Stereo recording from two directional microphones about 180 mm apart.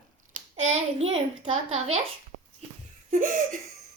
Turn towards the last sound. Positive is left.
turn(degrees=-45)  # may be behind; listen again after turning